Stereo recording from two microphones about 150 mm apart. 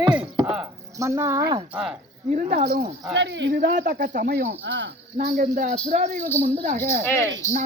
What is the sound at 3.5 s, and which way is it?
Speech, 60° right (ahead or behind).